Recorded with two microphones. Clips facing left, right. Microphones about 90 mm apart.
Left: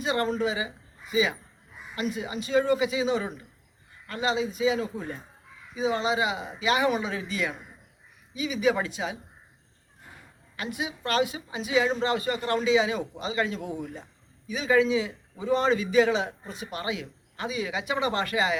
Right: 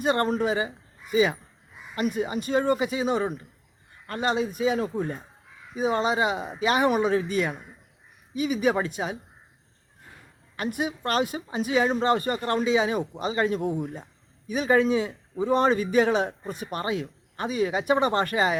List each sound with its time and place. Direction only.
0.0 s a man's voice: 50° right (ahead or behind)
10.6 s a man's voice: 50° right (ahead or behind)